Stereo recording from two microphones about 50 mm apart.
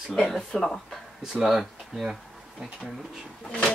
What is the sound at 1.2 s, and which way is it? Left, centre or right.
Speech, centre.